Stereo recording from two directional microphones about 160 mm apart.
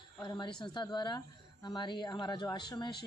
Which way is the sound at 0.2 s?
30° left (ahead or behind).